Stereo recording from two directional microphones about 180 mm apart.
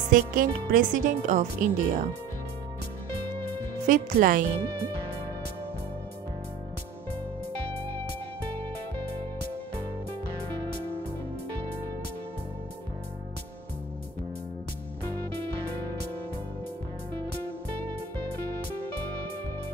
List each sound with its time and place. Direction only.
0.1 s speech: 50° right (ahead or behind)
3.8 s speech: 50° right (ahead or behind)